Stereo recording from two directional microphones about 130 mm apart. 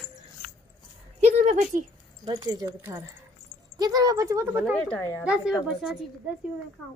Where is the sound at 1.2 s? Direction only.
55° right (ahead or behind).